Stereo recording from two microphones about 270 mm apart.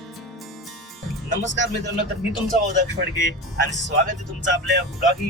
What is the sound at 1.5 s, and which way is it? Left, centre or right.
Speech, right.